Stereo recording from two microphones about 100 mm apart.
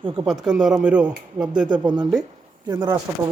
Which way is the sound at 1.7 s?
45° right (ahead or behind).